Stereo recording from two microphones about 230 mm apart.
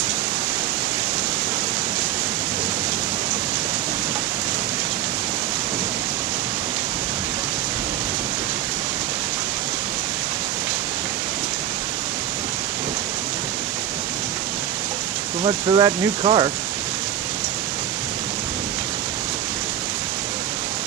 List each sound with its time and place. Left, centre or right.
15.4 s speech: right